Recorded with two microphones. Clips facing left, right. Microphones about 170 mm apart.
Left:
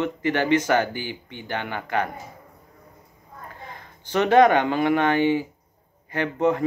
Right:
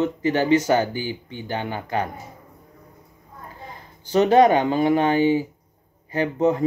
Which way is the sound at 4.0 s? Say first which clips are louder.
Right 4 dB; 40° right (ahead or behind).